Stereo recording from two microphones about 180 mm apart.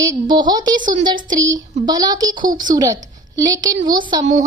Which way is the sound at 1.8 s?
25° right (ahead or behind).